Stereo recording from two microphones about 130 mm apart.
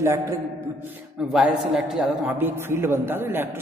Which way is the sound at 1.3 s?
5° right (ahead or behind).